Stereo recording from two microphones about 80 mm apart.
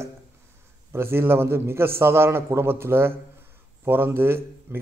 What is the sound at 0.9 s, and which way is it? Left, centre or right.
A man's voice, right.